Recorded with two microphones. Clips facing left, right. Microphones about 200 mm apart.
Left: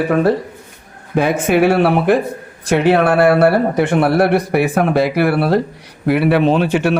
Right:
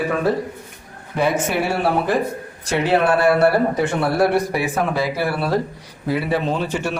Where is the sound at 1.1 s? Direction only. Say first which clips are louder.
Left 4 dB; 55° left (ahead or behind).